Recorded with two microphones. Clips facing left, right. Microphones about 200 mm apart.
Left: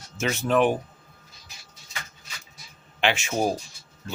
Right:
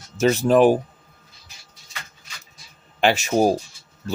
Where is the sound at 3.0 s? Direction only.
40° right (ahead or behind).